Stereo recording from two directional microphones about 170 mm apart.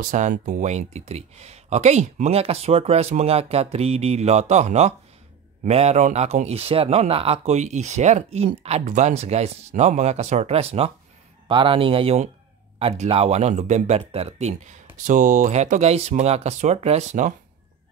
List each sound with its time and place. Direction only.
0.0 s speech: 50° right (ahead or behind)